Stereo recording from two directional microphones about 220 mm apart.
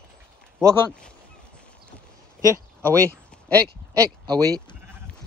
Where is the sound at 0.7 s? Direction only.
5° left (ahead or behind).